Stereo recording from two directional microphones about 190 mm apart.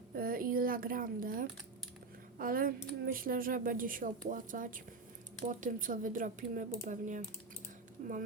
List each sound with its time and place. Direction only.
0.2 s speech: 50° right (ahead or behind)